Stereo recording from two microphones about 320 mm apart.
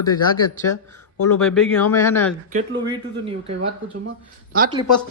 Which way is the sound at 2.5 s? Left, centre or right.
Right.